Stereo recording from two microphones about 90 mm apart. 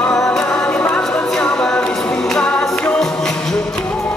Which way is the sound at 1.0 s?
5° left (ahead or behind).